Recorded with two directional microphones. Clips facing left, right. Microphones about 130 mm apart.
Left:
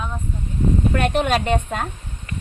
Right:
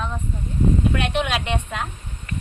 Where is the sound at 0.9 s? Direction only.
45° left (ahead or behind).